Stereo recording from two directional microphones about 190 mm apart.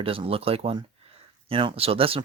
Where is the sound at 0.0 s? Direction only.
30° right (ahead or behind).